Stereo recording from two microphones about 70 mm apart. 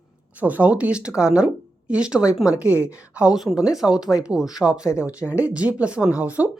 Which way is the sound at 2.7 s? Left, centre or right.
Left.